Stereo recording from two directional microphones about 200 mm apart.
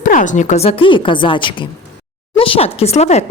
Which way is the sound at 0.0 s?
40° left (ahead or behind).